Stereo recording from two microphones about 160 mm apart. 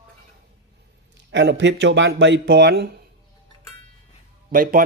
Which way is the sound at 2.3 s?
90° right.